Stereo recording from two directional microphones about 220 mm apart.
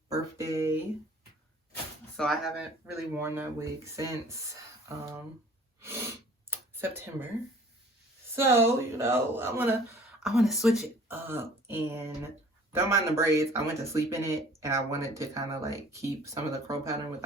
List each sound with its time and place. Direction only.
0.3 s a sound: 15° right (ahead or behind)
2.1 s speech: centre (ahead or behind)
2.9 s speech: 10° right (ahead or behind)
5.8 s gasp: 10° right (ahead or behind)
6.5 s a sound: 10° right (ahead or behind)
8.4 s speech: 10° right (ahead or behind)